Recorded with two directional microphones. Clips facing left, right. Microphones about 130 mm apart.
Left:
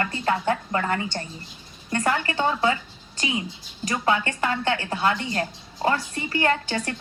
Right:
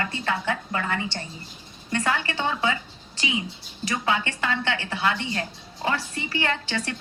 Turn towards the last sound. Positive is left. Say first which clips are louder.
# left 4 dB
turn(degrees=40)  # may be behind; listen again after turning